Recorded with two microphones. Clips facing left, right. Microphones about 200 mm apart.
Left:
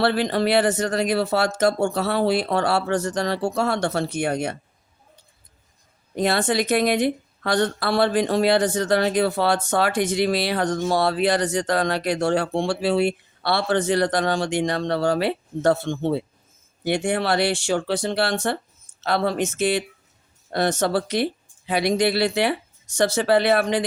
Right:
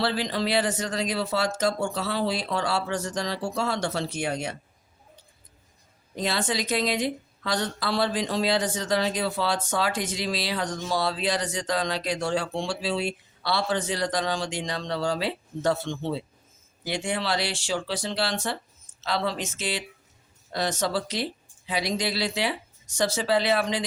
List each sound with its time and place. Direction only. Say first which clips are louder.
0.0 s a woman's voice: left 6 dB; 60° left (ahead or behind)
6.1 s a woman's voice: left 7 dB; 60° left (ahead or behind)